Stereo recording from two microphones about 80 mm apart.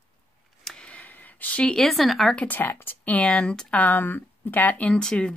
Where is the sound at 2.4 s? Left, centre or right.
Left.